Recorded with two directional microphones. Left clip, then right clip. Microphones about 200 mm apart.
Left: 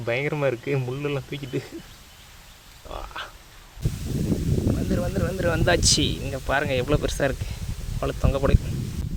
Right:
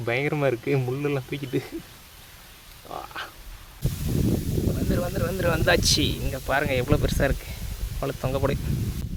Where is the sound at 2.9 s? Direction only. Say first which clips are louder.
Even; 15° right (ahead or behind).